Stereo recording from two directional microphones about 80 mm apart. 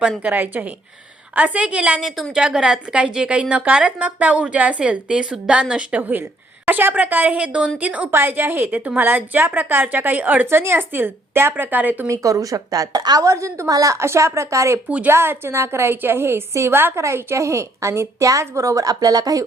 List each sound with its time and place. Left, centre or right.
0.2 s a woman's voice: right
12.0 s a woman's voice: right
14.8 s speech: centre
15.1 s a woman's voice: right